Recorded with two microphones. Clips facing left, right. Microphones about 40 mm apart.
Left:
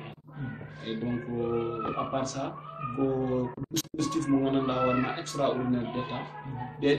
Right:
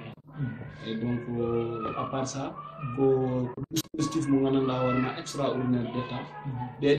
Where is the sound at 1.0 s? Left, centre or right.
Left.